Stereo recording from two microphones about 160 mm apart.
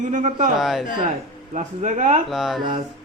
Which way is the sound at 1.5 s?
50° right (ahead or behind).